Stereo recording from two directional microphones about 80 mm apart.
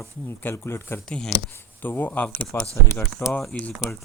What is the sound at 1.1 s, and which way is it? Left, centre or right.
Speech, centre.